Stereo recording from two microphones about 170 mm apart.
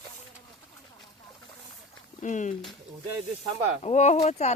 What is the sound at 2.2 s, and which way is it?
Speech, 45° left (ahead or behind).